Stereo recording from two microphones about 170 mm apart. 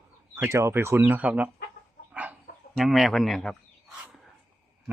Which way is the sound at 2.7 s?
Centre (ahead or behind).